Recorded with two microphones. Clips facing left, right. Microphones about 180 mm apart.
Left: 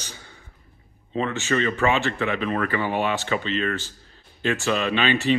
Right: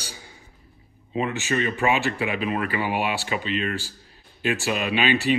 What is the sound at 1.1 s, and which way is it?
Speech, 15° right (ahead or behind).